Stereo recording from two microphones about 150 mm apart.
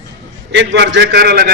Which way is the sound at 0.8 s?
90° right.